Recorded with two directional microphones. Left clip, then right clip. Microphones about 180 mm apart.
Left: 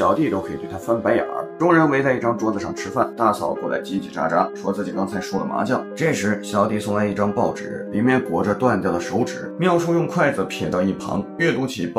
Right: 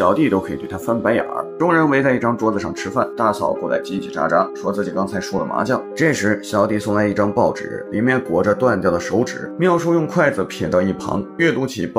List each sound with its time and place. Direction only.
0.0 s speech: 25° right (ahead or behind)
5.0 s speech: 35° right (ahead or behind)